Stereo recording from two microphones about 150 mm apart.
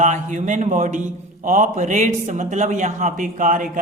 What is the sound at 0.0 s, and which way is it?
A man's voice, 55° right (ahead or behind).